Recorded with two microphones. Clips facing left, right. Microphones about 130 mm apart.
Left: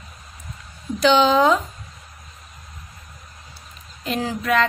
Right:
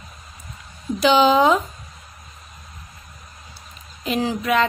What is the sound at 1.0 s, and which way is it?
Speech, 5° right (ahead or behind).